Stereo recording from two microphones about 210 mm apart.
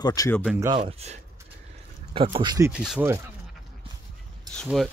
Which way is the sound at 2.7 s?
5° right (ahead or behind).